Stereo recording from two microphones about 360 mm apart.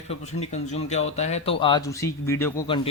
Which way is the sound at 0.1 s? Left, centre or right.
Centre.